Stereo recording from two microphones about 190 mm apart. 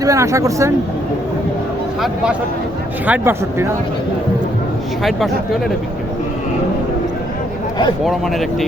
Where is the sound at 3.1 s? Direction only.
10° right (ahead or behind).